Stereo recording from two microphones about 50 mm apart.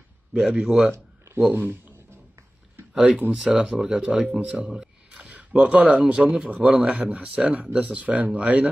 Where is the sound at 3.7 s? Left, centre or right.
Centre.